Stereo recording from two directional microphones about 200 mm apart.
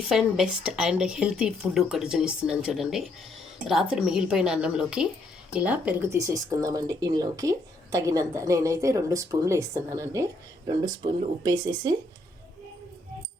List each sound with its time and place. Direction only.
0.1 s speech: centre (ahead or behind); by 11.9 s 20° right (ahead or behind)